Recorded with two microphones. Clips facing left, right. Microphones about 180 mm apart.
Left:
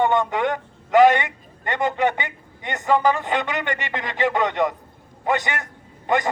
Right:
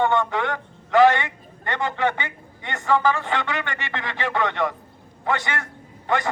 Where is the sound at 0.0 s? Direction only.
15° left (ahead or behind).